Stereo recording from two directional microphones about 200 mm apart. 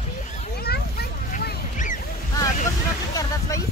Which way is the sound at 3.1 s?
15° left (ahead or behind).